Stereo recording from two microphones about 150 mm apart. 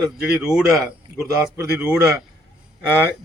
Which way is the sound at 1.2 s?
20° right (ahead or behind).